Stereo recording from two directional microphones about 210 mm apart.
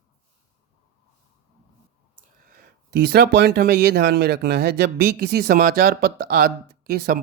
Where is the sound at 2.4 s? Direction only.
45° right (ahead or behind).